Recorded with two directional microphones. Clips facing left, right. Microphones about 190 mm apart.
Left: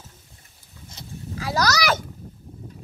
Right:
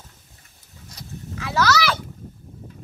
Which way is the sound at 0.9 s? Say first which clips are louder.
Even; 35° left (ahead or behind).